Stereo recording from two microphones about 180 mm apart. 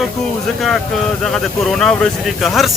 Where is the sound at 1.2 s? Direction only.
Centre (ahead or behind).